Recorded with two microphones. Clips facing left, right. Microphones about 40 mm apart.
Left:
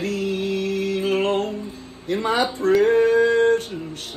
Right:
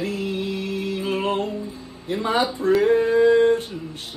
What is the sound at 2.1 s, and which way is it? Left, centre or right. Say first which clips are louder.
Speech: left 1 dB; left.